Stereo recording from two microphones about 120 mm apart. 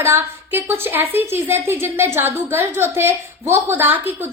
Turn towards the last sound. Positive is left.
turn(degrees=-15)  # may be behind; listen again after turning